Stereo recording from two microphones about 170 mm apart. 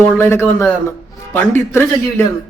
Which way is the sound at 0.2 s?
15° left (ahead or behind).